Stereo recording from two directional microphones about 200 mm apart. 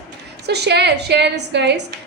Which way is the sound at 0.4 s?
55° right (ahead or behind).